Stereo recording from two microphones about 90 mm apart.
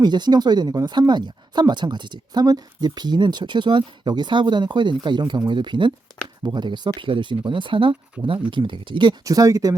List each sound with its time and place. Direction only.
0.0 s speech: 55° right (ahead or behind)
9.2 s speech: 40° right (ahead or behind)